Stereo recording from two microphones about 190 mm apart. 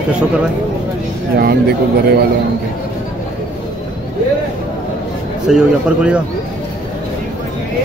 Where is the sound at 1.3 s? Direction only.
55° right (ahead or behind).